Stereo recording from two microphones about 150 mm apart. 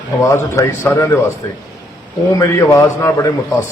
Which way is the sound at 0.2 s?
20° left (ahead or behind).